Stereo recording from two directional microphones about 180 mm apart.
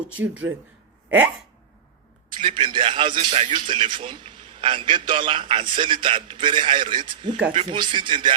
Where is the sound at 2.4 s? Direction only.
30° right (ahead or behind).